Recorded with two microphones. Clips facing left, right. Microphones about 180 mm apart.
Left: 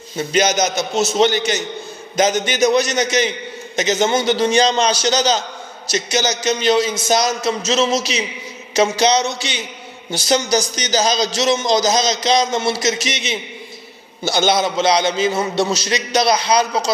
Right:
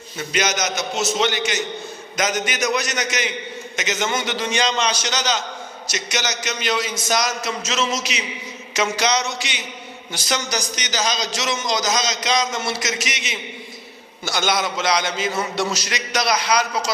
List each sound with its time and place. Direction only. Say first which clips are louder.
0.2 s a man's voice: left 6 dB; 30° left (ahead or behind)